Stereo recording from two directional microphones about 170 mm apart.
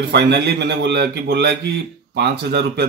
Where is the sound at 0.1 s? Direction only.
80° right.